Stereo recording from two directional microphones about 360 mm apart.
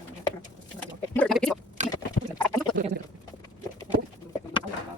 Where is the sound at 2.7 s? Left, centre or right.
Right.